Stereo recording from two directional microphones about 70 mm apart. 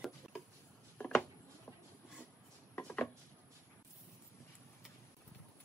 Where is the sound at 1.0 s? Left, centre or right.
Left.